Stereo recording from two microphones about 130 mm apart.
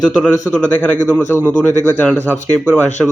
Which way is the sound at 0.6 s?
10° left (ahead or behind).